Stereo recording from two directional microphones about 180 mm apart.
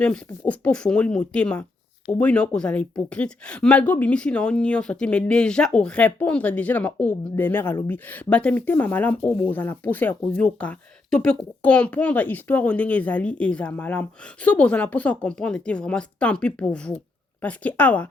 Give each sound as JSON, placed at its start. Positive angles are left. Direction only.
{"t": 0.0, "sound": "speech", "side_deg": 5}